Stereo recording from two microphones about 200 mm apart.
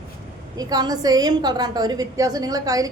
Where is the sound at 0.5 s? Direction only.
20° right (ahead or behind).